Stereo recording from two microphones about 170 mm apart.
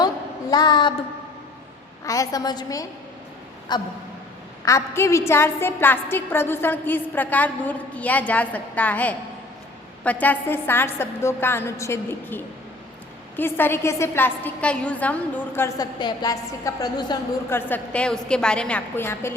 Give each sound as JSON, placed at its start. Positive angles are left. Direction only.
{"t": 0.5, "sound": "a woman's voice", "side_deg": 25}
{"t": 2.0, "sound": "a woman's voice", "side_deg": 20}
{"t": 17.5, "sound": "a woman's voice", "side_deg": 10}